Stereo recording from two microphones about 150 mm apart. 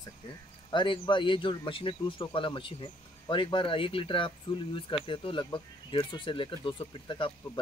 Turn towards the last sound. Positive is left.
turn(degrees=35)  # may be behind; listen again after turning